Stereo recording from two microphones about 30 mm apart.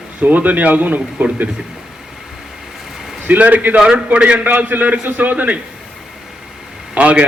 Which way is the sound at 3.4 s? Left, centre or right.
Right.